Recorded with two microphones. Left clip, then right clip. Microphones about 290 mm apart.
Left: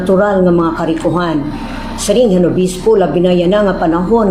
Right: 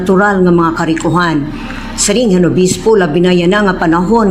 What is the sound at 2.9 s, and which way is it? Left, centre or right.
Speech, right.